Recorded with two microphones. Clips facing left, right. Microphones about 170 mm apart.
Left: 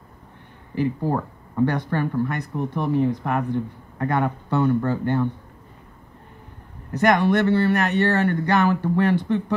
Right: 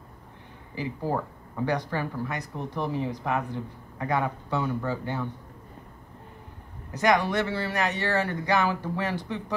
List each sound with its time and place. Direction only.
0.7 s speech: 60° left (ahead or behind)
6.9 s speech: 55° left (ahead or behind)